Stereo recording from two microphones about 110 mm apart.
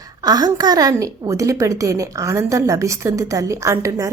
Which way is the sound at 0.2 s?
35° right (ahead or behind).